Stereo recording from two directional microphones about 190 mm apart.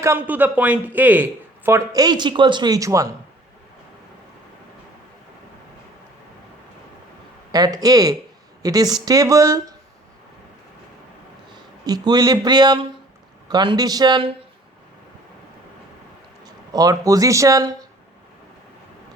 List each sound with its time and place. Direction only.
0.0 s speech: 10° right (ahead or behind)
7.5 s speech: 20° right (ahead or behind)
11.5 s speech: 20° right (ahead or behind)
16.5 s speech: 20° right (ahead or behind)